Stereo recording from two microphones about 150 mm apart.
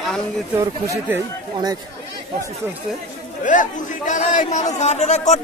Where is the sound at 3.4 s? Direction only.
60° left (ahead or behind).